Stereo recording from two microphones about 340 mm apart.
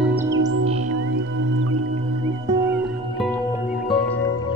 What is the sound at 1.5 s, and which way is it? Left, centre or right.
Music, right.